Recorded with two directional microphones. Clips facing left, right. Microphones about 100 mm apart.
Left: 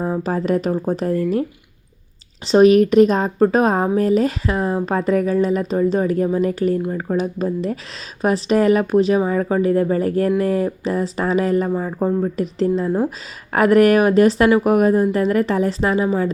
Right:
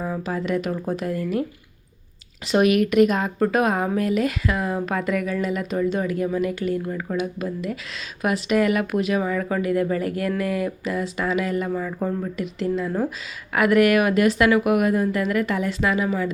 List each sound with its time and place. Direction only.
0.0 s speech: 35° left (ahead or behind)
2.5 s speech: 30° left (ahead or behind)